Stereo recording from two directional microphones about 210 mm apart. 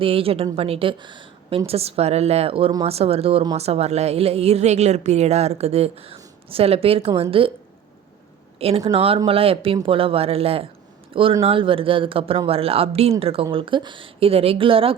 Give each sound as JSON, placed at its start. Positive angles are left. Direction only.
{"t": 0.0, "sound": "a woman's voice", "side_deg": -25}
{"t": 8.5, "sound": "a woman's voice", "side_deg": -30}